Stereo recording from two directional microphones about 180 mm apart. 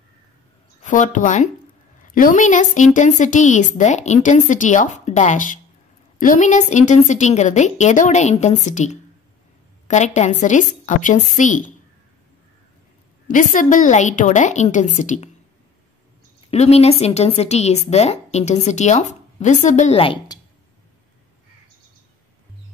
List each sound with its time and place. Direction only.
0.8 s a woman's voice: 45° left (ahead or behind)
13.3 s a woman's voice: 45° left (ahead or behind)
16.4 s a woman's voice: 35° left (ahead or behind)